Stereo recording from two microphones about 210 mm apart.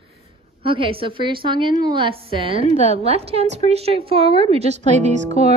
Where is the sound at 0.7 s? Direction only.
25° right (ahead or behind).